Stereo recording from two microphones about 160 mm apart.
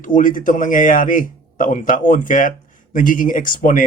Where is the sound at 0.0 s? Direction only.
55° left (ahead or behind).